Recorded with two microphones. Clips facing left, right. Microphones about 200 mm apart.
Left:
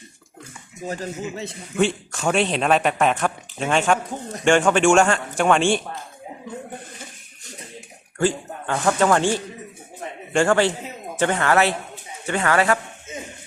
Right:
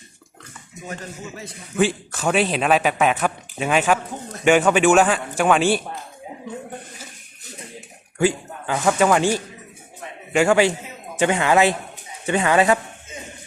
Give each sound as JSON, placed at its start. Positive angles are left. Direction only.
{"t": 1.2, "sound": "a man's voice", "side_deg": 25}
{"t": 1.7, "sound": "a man's voice", "side_deg": 0}
{"t": 8.2, "sound": "speech", "side_deg": -10}
{"t": 10.3, "sound": "speech", "side_deg": -10}